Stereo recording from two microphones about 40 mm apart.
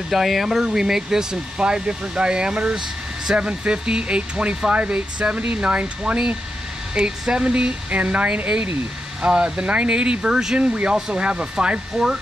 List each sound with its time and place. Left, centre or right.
0.1 s speech: centre; by 7.7 s right
7.9 s speech: right
9.2 s speech: right